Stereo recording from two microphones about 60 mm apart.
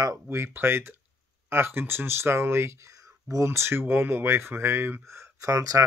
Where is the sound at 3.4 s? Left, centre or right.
Right.